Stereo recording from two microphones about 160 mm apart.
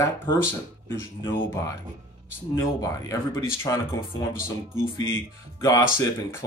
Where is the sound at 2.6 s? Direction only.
20° left (ahead or behind).